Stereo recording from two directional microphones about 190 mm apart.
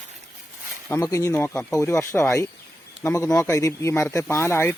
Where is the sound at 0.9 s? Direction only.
15° left (ahead or behind).